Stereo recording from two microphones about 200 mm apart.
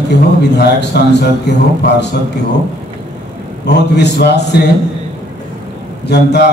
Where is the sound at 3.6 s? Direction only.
60° left (ahead or behind).